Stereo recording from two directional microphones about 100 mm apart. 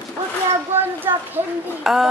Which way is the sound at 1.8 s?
5° right (ahead or behind).